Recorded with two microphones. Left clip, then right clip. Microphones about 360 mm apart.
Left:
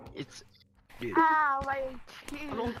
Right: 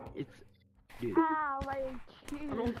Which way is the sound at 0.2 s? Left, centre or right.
Left.